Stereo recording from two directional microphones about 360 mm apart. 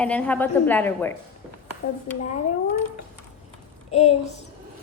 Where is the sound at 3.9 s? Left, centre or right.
Centre.